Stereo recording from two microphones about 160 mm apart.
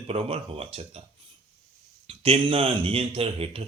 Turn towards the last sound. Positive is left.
turn(degrees=-35)  # may be behind; listen again after turning